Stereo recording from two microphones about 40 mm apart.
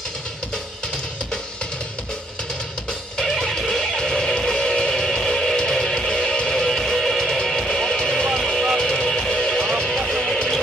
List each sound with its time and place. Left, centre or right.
3.3 s music: centre
8.4 s a sound: centre
9.0 s music: centre
9.8 s music: centre